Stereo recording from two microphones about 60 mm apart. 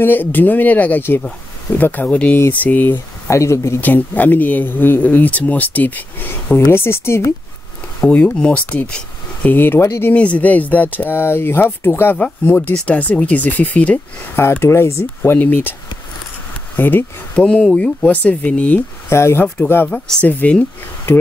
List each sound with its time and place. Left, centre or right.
0.0 s speech: left
3.3 s speech: left
3.8 s speech: left
8.0 s speech: centre
9.4 s speech: left
10.1 s speech: left
12.7 s speech: left
14.3 s speech: left
15.3 s speech: left
16.7 s speech: left
17.4 s speech: centre
19.0 s speech: left
19.9 s speech: centre
20.2 s speech: left